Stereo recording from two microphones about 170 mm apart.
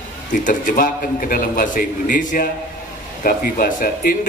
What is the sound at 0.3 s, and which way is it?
A man's voice, 50° left (ahead or behind).